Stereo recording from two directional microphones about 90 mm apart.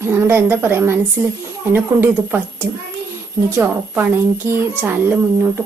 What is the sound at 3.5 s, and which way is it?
Speech, 20° right (ahead or behind).